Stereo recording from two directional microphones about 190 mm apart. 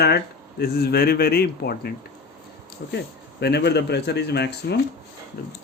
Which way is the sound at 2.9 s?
60° left (ahead or behind).